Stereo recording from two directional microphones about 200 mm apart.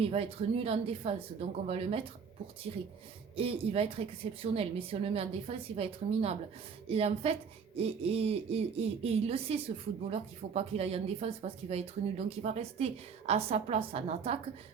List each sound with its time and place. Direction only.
0.0 s speech: 30° right (ahead or behind)